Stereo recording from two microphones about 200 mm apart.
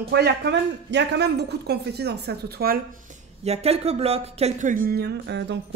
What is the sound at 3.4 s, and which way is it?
Speech, 30° right (ahead or behind).